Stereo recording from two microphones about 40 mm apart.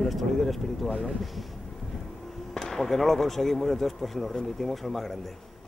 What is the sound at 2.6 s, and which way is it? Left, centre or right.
Speech, centre.